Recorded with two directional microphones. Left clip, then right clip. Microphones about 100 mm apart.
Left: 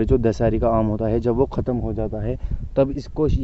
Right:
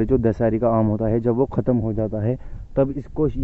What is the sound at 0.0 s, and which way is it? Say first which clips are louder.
Speech: even; 25° left (ahead or behind).